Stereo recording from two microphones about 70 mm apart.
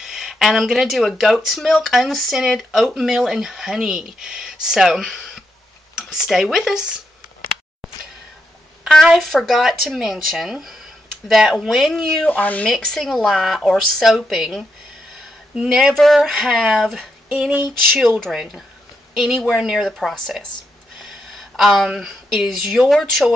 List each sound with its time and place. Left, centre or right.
0.0 s speech: centre
9.0 s speech: centre
12.3 s speech: left
12.6 s speech: centre
15.9 s speech: centre
17.3 s a sound: right
18.3 s speech: centre
20.0 s speech: centre
21.5 s speech: centre